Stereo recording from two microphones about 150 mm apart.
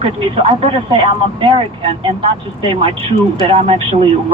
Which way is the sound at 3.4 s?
40° right (ahead or behind).